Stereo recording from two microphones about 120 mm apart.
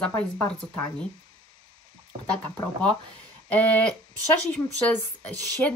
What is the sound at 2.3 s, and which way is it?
Speech, 10° left (ahead or behind).